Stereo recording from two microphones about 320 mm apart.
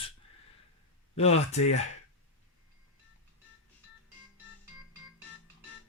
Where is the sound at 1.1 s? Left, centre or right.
Centre.